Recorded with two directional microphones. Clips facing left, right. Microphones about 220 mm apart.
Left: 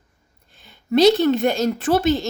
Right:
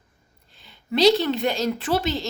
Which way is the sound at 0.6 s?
50° left (ahead or behind).